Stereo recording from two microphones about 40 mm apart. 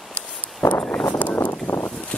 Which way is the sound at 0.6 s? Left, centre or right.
Left.